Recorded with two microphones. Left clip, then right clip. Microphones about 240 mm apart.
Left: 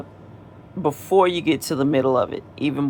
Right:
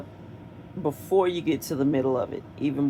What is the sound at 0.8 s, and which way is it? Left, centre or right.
Speech, left.